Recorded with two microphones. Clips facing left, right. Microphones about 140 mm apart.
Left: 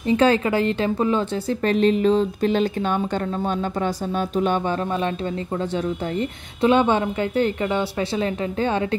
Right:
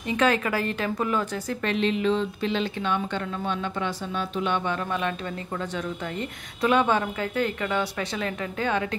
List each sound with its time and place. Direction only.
0.1 s a woman's voice: 30° left (ahead or behind)
4.4 s a woman's voice: 35° left (ahead or behind)
6.1 s a woman's voice: 30° left (ahead or behind)